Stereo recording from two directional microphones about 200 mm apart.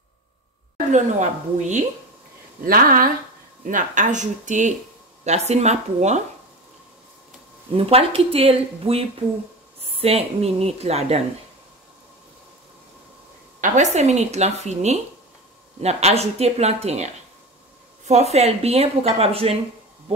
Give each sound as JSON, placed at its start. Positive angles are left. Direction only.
{"t": 0.9, "sound": "a woman's voice", "side_deg": -35}
{"t": 7.7, "sound": "a woman's voice", "side_deg": -30}
{"t": 13.6, "sound": "a woman's voice", "side_deg": -35}